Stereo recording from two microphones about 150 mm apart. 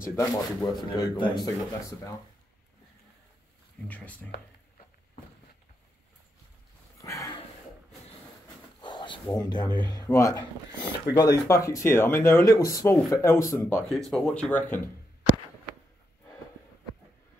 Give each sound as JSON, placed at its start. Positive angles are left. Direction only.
{"t": 0.0, "sound": "speech", "side_deg": 20}
{"t": 0.8, "sound": "speech", "side_deg": 30}
{"t": 3.8, "sound": "speech", "side_deg": 10}
{"t": 7.0, "sound": "a sound", "side_deg": 20}
{"t": 8.8, "sound": "a sound", "side_deg": 30}
{"t": 9.8, "sound": "speech", "side_deg": 25}
{"t": 13.9, "sound": "speech", "side_deg": 5}